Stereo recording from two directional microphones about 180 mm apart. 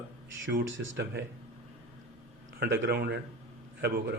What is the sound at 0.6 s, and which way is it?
Speech, 90° right.